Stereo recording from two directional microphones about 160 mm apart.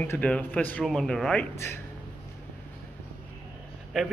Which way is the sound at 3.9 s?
5° left (ahead or behind).